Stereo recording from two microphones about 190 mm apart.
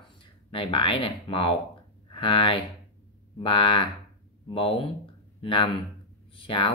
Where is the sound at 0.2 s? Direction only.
25° left (ahead or behind).